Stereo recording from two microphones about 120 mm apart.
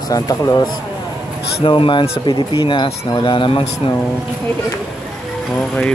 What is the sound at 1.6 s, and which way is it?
Speech, 45° left (ahead or behind).